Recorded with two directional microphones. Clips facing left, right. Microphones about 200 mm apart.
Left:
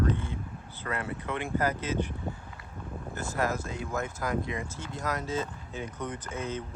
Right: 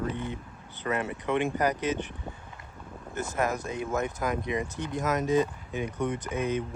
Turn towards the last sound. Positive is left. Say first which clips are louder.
# right 5 dB
turn(degrees=-15)  # may be behind; listen again after turning